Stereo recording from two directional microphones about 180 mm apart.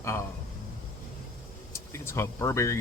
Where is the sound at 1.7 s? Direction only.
15° left (ahead or behind).